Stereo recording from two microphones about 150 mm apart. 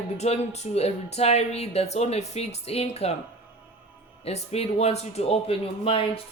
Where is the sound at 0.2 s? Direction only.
50° left (ahead or behind).